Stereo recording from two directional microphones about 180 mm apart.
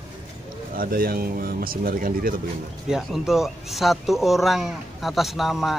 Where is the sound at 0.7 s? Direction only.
55° right (ahead or behind).